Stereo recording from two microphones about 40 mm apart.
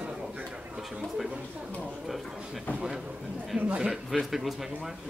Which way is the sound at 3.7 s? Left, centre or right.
Right.